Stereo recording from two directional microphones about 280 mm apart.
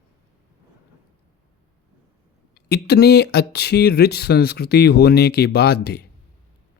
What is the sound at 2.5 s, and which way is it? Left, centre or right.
Speech, left.